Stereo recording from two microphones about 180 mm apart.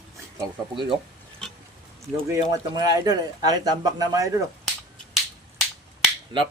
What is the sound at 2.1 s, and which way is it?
Speech, 20° right (ahead or behind).